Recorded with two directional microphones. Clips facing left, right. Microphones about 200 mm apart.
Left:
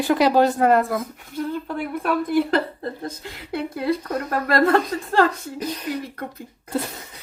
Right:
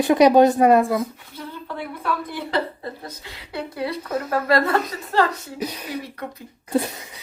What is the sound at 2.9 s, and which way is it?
Speech, 50° left (ahead or behind).